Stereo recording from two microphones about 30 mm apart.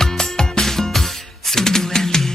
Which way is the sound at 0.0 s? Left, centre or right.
Centre.